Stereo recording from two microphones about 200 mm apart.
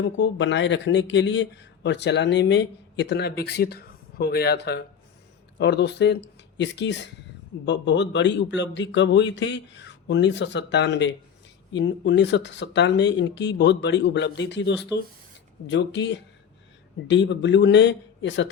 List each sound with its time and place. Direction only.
0.0 s speech: 65° left (ahead or behind)